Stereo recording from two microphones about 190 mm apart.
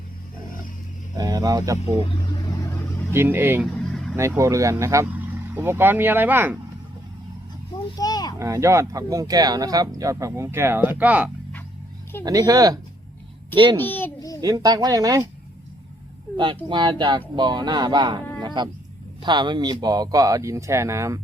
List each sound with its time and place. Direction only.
1.1 s speech: 20° right (ahead or behind)
3.1 s speech: 10° right (ahead or behind)
3.8 s vehicle: centre (ahead or behind)
4.1 s speech: 15° right (ahead or behind)
7.9 s speech: 20° left (ahead or behind)
8.4 s speech: 15° right (ahead or behind)
12.2 s speech: 20° right (ahead or behind)
13.8 s a sound: 10° left (ahead or behind)
14.4 s speech: 20° right (ahead or behind)
16.4 s speech: 25° right (ahead or behind)